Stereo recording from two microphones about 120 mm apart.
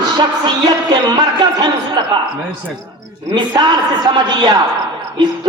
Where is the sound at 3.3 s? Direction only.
40° right (ahead or behind).